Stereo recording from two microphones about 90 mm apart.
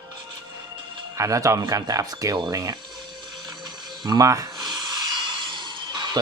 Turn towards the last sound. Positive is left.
turn(degrees=-55)  # may be behind; listen again after turning